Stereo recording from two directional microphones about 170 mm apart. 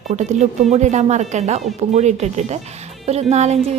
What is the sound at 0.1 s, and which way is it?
A woman's voice, 40° right (ahead or behind).